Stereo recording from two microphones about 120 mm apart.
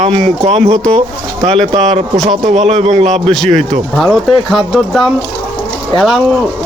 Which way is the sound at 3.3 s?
5° left (ahead or behind).